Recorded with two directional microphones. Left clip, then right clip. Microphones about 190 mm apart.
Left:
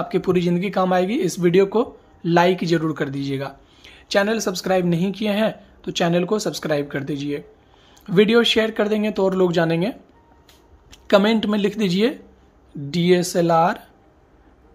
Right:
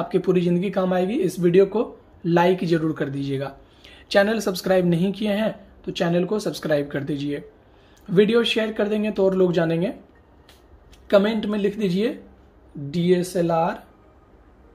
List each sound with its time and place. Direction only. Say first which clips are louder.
0.0 s speech: left 1 dB; 20° left (ahead or behind)
8.0 s speech: left 2 dB; 25° left (ahead or behind)